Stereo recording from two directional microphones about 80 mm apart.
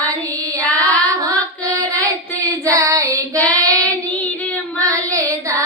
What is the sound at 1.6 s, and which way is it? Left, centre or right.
Child singing, right.